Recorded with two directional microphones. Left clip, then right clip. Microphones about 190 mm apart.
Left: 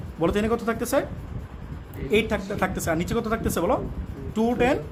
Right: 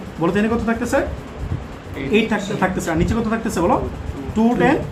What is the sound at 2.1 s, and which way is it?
Speech, 60° left (ahead or behind).